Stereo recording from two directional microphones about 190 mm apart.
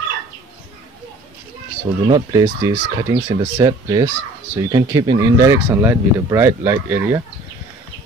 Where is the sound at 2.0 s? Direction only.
20° right (ahead or behind).